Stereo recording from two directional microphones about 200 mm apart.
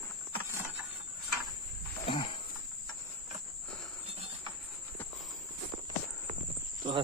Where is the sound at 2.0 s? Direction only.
25° left (ahead or behind).